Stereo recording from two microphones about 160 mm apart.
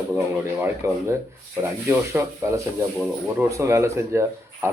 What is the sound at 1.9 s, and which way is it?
Speech, 15° right (ahead or behind).